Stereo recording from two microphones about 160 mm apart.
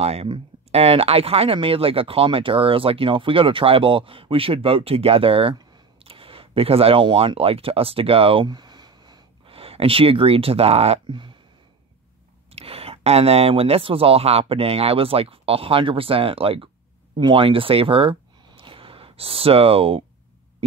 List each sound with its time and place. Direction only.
0.0 s speech: 40° right (ahead or behind)
12.5 s speech: 40° right (ahead or behind)
18.6 s a sound: 35° right (ahead or behind)